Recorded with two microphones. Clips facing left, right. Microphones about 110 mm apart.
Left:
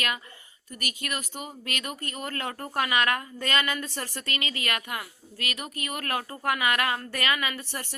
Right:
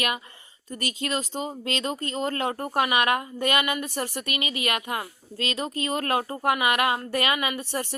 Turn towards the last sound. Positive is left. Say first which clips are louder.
# right 5 dB
turn(degrees=-20)  # may be behind; listen again after turning